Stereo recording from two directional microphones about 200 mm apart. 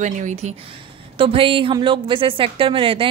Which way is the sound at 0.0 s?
40° right (ahead or behind).